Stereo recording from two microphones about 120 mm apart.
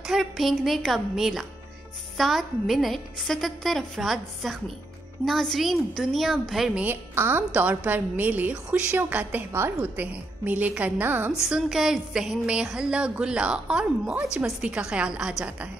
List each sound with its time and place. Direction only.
0.0 s a woman's voice: centre (ahead or behind)
6.8 s a woman's voice: 15° right (ahead or behind)
11.4 s a woman's voice: 5° right (ahead or behind)